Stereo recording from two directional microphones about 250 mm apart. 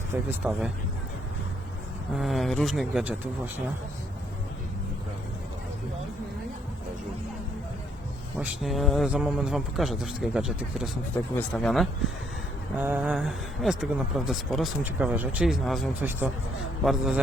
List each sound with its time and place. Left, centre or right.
0.1 s speech: centre
2.1 s speech: centre
8.4 s speech: centre